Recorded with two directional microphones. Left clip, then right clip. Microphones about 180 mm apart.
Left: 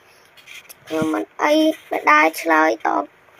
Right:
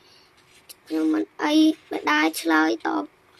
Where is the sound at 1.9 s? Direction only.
10° right (ahead or behind).